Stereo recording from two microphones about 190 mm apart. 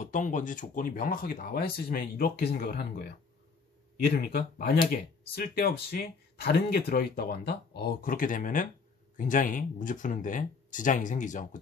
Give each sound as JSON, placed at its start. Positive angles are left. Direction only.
{"t": 0.0, "sound": "speech", "side_deg": 40}